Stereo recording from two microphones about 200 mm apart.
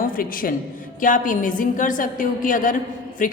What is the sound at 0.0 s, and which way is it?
A woman's voice, 45° left (ahead or behind).